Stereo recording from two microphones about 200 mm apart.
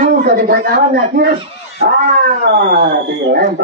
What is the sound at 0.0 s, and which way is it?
A man's voice, 50° right (ahead or behind).